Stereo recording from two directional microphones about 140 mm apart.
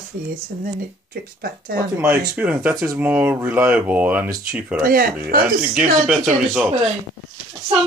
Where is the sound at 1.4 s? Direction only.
90° right.